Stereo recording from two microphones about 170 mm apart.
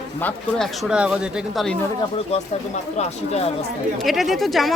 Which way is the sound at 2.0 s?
35° left (ahead or behind).